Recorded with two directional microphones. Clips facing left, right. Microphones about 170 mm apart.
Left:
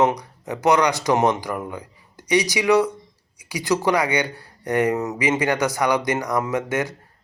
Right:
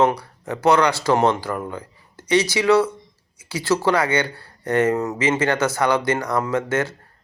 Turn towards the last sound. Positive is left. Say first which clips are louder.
# right 2 dB
turn(degrees=15)  # may be behind; listen again after turning